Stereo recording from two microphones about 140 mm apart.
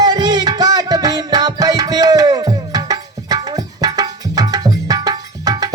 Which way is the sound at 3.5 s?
25° right (ahead or behind).